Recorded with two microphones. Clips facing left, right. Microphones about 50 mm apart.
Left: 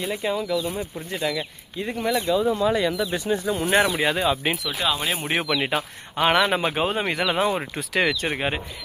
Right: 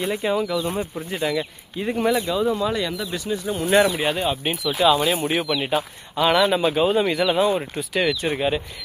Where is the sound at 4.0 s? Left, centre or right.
Left.